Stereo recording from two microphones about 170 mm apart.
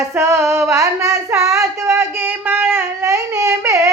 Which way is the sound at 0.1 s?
15° right (ahead or behind).